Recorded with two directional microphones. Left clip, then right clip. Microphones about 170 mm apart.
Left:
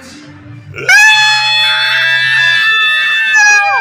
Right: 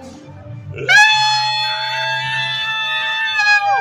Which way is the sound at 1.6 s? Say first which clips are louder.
Left 9 dB; 15° left (ahead or behind).